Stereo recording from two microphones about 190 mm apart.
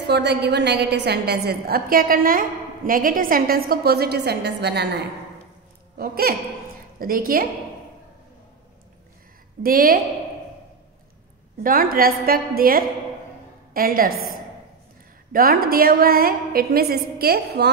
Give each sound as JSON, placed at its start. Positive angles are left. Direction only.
{"t": 0.0, "sound": "a woman's voice", "side_deg": -60}
{"t": 9.6, "sound": "a woman's voice", "side_deg": -50}
{"t": 11.6, "sound": "a woman's voice", "side_deg": -50}